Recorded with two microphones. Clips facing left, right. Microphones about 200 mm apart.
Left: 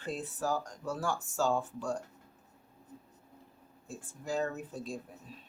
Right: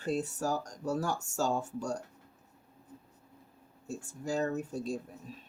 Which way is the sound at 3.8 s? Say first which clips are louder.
Right 3 dB; 45° right (ahead or behind).